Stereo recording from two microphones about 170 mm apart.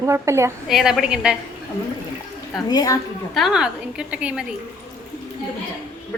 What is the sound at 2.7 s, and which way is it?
Speech, 20° left (ahead or behind).